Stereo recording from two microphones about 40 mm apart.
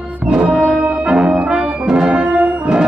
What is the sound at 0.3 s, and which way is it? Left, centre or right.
Music, right.